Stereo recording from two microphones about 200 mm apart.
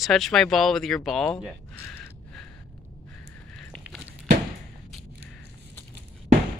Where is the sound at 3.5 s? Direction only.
5° left (ahead or behind).